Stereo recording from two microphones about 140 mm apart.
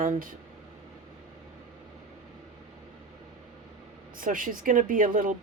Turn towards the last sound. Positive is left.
turn(degrees=-75)  # may be behind; listen again after turning